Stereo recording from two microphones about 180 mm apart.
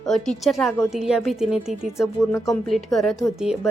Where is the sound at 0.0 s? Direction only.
5° left (ahead or behind).